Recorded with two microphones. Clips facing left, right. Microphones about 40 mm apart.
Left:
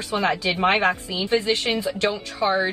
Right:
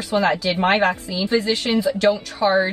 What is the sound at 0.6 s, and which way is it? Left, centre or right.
Speech, right.